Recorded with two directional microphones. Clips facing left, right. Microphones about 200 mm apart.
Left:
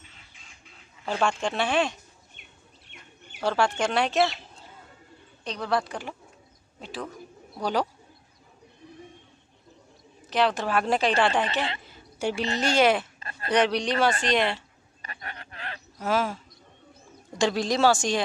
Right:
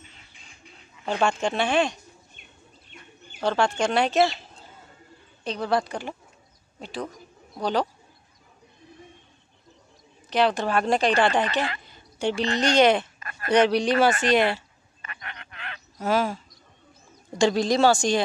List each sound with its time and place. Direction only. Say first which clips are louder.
1.0 s speech: right 2 dB; centre (ahead or behind)
2.9 s bird: right 3 dB; 70° left (ahead or behind)
3.3 s speech: right 1 dB; 5° left (ahead or behind)
5.4 s a man's voice: right 3 dB; 5° right (ahead or behind)
10.3 s speech: right 2 dB; centre (ahead or behind)
11.8 s a sound: right 2 dB; 5° left (ahead or behind)
12.5 s speech: right 3 dB; 5° left (ahead or behind)
13.2 s a sound: even; 30° left (ahead or behind)
13.5 s speech: right 4 dB; centre (ahead or behind)
15.0 s a sound: left 1 dB; 35° left (ahead or behind)
16.0 s speech: right 2 dB; centre (ahead or behind)
17.4 s speech: right 3 dB; centre (ahead or behind)